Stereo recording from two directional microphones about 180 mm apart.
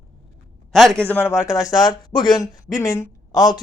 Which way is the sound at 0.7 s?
Centre (ahead or behind).